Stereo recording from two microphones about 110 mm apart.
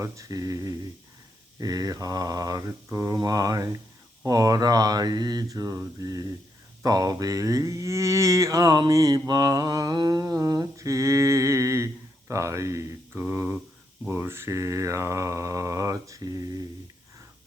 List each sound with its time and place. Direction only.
0.0 s speech: 30° right (ahead or behind)
12.3 s mantra: 25° right (ahead or behind)